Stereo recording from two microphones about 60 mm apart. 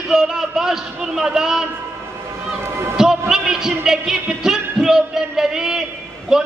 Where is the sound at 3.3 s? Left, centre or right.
Centre.